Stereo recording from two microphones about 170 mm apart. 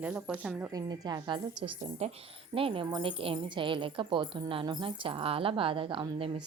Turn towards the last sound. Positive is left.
turn(degrees=-30)  # may be behind; listen again after turning